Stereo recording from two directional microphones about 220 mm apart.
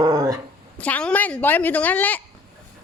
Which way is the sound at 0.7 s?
5° left (ahead or behind).